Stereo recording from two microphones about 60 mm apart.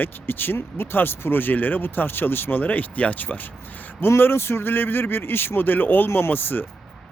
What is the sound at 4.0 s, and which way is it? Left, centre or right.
Speech, left.